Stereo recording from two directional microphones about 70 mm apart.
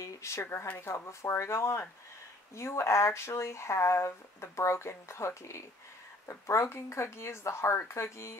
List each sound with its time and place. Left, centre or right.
0.0 s speech: left